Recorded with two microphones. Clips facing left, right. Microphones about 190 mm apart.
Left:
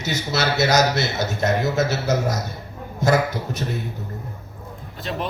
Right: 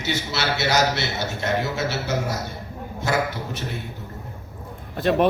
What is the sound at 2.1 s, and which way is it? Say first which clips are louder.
Speech: left 3 dB; 40° left (ahead or behind).